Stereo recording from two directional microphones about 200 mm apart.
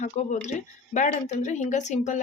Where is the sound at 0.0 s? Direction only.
35° left (ahead or behind).